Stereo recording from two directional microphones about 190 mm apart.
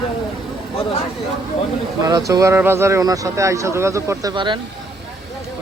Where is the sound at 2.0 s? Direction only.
15° right (ahead or behind).